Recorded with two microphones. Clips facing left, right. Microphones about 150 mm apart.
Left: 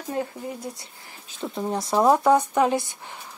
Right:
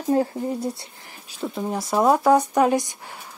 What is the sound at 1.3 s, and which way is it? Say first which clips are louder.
Speech: right 1 dB; 5° right (ahead or behind).